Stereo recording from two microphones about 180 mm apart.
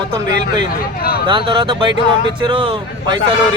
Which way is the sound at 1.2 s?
25° right (ahead or behind).